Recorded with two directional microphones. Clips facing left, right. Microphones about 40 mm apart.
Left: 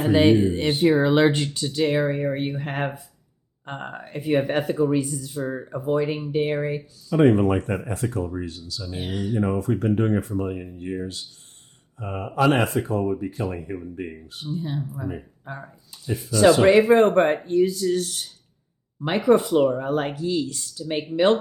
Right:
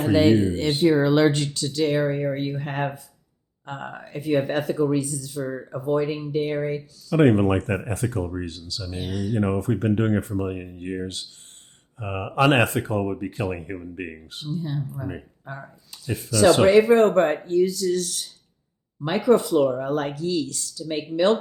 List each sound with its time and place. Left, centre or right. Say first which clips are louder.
0.2 s speech: left 1 dB; left
7.2 s speech: even; right
9.0 s speech: even; left
9.4 s speech: even; right
15.9 s speech: left 1 dB; right
16.6 s speech: even; left